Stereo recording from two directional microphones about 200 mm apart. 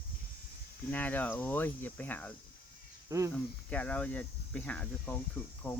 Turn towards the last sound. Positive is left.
turn(degrees=10)  # may be behind; listen again after turning